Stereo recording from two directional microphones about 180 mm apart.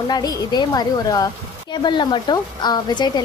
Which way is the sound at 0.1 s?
25° left (ahead or behind).